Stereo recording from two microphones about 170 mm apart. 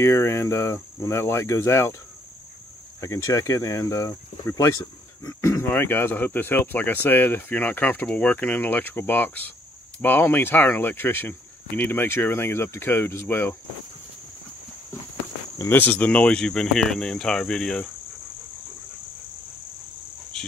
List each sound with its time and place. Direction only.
0.0 s speech: 15° left (ahead or behind)
3.0 s speech: 15° left (ahead or behind)
15.5 s speech: 15° left (ahead or behind)
20.3 s cricket: 5° left (ahead or behind)